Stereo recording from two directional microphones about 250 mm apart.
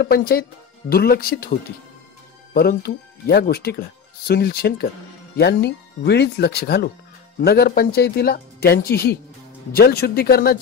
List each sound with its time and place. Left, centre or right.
0.0 s speech: left
2.5 s speech: left